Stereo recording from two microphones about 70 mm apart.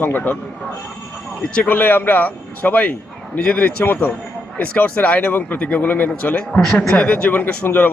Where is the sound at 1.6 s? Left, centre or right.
Left.